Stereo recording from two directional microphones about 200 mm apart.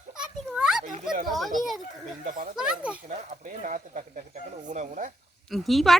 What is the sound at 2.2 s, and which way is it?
Speech, 40° right (ahead or behind).